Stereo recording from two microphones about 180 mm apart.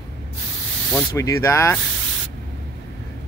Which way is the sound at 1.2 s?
15° left (ahead or behind).